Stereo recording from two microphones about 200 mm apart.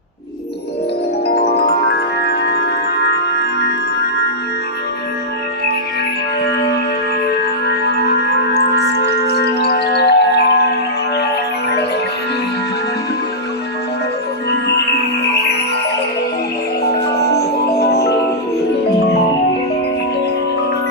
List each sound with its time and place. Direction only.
2.2 s music: 55° left (ahead or behind)
8.5 s music: 55° left (ahead or behind)
15.2 s music: 55° left (ahead or behind)
16.8 s music: 55° left (ahead or behind)